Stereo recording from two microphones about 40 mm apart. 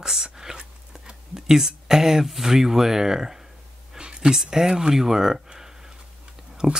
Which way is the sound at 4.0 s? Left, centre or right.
Right.